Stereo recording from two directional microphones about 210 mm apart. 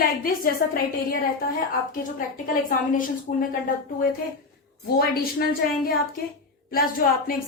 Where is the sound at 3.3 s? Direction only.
40° left (ahead or behind).